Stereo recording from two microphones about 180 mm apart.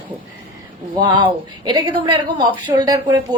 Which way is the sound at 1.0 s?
25° right (ahead or behind).